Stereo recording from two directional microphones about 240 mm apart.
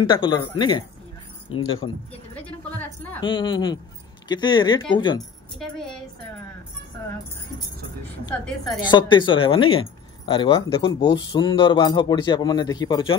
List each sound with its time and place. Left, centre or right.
0.1 s speech: centre
2.3 s a woman's voice: centre
3.2 s speech: centre
5.6 s a woman's voice: centre
8.3 s speech: centre